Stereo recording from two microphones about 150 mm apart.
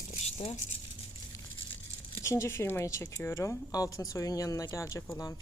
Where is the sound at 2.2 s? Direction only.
20° left (ahead or behind).